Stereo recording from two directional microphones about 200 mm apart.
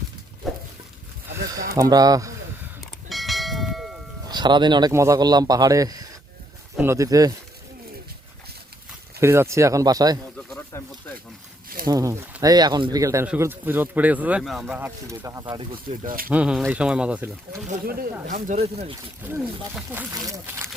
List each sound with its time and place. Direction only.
0.4 s a sound: centre (ahead or behind)
1.7 s speech: 15° right (ahead or behind)
3.1 s church bell: centre (ahead or behind)
4.3 s speech: 20° right (ahead or behind)
9.2 s speech: 15° right (ahead or behind)
10.7 s snake: 10° left (ahead or behind)
11.9 s speech: 15° right (ahead or behind)
16.0 s speech: 45° right (ahead or behind)
16.3 s speech: 5° right (ahead or behind)
17.7 s speech: 45° right (ahead or behind); by 18.9 s 30° right (ahead or behind)
19.2 s speech: 10° right (ahead or behind)